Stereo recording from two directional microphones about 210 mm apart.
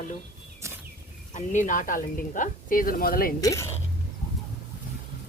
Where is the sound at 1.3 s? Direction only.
35° left (ahead or behind).